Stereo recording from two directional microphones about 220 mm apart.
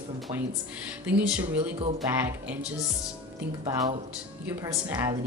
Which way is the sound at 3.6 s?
20° right (ahead or behind).